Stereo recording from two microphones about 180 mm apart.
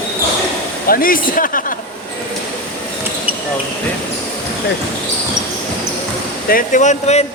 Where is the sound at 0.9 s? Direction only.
50° left (ahead or behind).